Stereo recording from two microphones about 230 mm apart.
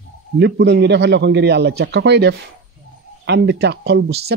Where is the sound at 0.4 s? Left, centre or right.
Right.